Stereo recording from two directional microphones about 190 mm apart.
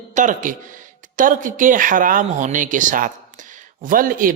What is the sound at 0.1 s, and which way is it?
Speech, 40° right (ahead or behind).